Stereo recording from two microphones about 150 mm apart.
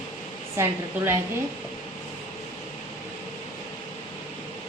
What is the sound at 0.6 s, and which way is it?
Speech, 15° right (ahead or behind).